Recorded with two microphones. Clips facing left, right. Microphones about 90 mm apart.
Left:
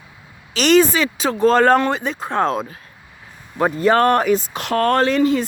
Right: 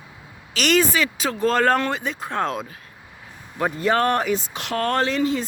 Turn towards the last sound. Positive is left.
turn(degrees=60)  # may be behind; listen again after turning